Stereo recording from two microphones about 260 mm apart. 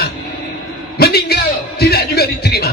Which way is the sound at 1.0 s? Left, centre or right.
Left.